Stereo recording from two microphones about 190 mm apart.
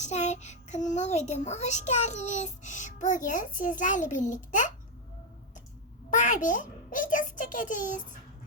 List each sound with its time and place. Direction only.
0.0 s a child's voice: 35° left (ahead or behind)
6.1 s a child's voice: 40° left (ahead or behind)